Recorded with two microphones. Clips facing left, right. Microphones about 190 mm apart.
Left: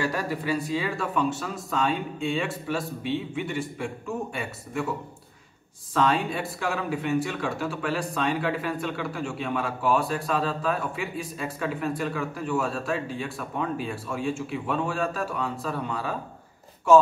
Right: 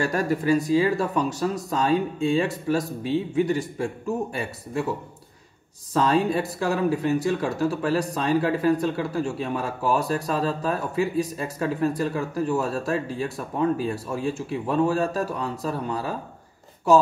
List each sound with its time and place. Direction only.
0.0 s speech: 45° right (ahead or behind)
5.9 s speech: 40° right (ahead or behind)